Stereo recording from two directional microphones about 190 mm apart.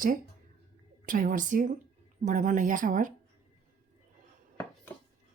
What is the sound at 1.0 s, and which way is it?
Speech, 45° right (ahead or behind).